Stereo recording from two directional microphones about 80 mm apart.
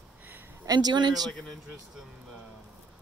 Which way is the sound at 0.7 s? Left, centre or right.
Right.